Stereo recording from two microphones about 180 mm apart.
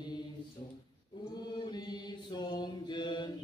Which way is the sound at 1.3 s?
25° left (ahead or behind).